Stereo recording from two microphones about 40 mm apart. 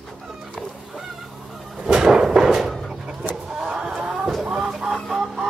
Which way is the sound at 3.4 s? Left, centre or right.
Centre.